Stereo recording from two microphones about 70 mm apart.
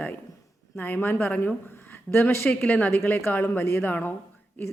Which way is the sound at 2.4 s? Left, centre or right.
Left.